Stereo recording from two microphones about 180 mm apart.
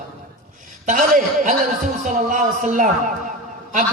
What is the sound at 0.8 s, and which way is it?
A man's voice, 45° right (ahead or behind).